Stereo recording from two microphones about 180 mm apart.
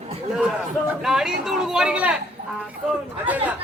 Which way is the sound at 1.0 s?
5° right (ahead or behind).